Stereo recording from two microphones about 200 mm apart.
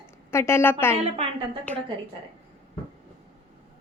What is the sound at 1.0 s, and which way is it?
Speech, 30° right (ahead or behind).